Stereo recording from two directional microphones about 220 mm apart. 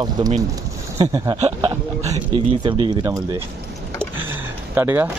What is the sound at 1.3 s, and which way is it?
Speech, 30° right (ahead or behind).